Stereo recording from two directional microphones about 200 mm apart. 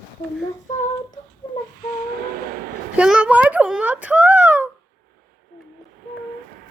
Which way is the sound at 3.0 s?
5° right (ahead or behind).